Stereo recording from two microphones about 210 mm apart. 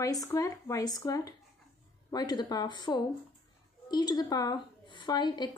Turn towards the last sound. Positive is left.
turn(degrees=20)  # may be behind; listen again after turning